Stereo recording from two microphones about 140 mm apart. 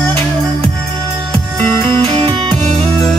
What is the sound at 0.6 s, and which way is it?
Music, 40° right (ahead or behind).